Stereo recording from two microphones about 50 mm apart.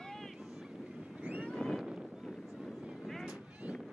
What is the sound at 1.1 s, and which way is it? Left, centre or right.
Vehicle, right.